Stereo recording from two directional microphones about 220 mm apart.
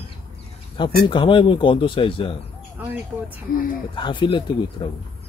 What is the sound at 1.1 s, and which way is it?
Speech, 20° left (ahead or behind).